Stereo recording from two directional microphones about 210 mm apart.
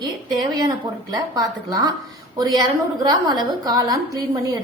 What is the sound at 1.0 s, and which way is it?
A woman's voice, 20° right (ahead or behind).